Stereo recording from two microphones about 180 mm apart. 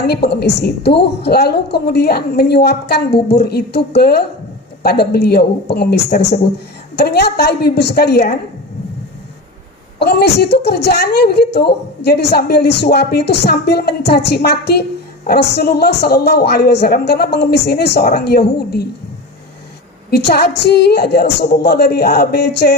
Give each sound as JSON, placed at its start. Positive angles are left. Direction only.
{"t": 0.1, "sound": "a woman's voice", "side_deg": 65}
{"t": 10.0, "sound": "a woman's voice", "side_deg": 60}
{"t": 20.1, "sound": "a woman's voice", "side_deg": 65}